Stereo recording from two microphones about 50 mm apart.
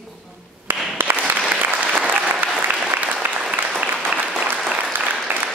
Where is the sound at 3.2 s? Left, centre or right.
Right.